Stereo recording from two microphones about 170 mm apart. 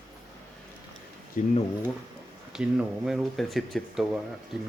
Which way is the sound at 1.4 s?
55° left (ahead or behind).